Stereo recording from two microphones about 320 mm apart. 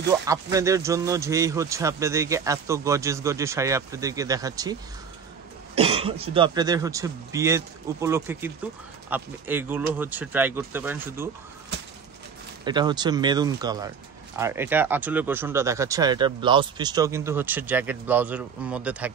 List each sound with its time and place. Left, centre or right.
0.1 s speech: centre
5.8 s cough: centre
6.3 s speech: centre
12.6 s speech: centre